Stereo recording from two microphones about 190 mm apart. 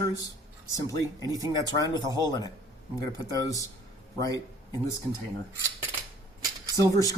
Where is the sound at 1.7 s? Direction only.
20° left (ahead or behind).